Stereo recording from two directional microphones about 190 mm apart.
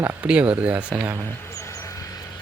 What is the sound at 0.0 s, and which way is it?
Speech, 10° right (ahead or behind).